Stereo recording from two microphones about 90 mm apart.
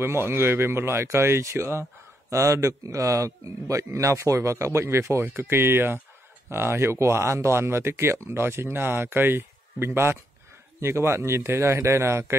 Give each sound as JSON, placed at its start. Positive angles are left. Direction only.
{"t": 0.0, "sound": "speech", "side_deg": -25}